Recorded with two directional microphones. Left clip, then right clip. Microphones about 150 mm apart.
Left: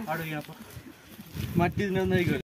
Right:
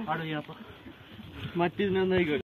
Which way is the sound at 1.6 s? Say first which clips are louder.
Even; 55° left (ahead or behind).